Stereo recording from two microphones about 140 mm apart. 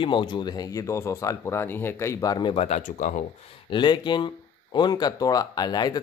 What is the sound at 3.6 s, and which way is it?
Speech, 35° left (ahead or behind).